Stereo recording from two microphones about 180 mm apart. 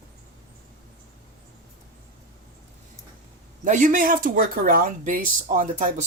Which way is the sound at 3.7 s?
45° right (ahead or behind).